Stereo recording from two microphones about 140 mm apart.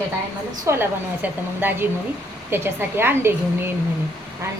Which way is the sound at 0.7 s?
15° right (ahead or behind).